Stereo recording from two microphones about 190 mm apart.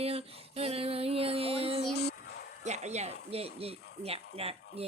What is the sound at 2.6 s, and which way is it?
Speech, 35° right (ahead or behind).